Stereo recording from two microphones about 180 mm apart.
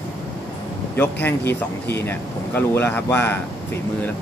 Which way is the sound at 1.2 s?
10° left (ahead or behind).